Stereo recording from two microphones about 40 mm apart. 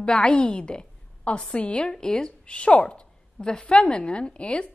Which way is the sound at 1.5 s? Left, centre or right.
Left.